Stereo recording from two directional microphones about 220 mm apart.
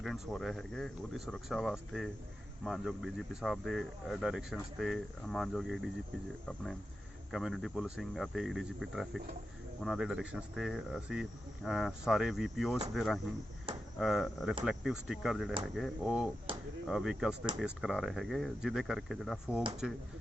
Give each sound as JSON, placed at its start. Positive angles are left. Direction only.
{"t": 0.0, "sound": "speech", "side_deg": 0}
{"t": 7.3, "sound": "speech", "side_deg": 0}
{"t": 13.7, "sound": "a sound", "side_deg": -25}
{"t": 14.0, "sound": "speech", "side_deg": 0}